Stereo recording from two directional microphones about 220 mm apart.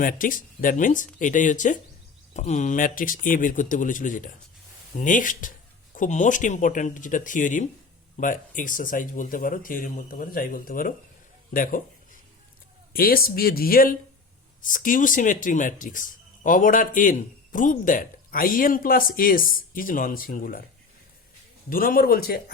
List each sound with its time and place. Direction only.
0.0 s speech: 40° left (ahead or behind)
12.9 s speech: 40° left (ahead or behind)
21.7 s speech: 40° left (ahead or behind)